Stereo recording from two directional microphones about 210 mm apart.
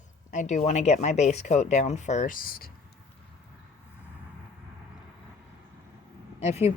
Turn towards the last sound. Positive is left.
turn(degrees=30)  # may be behind; listen again after turning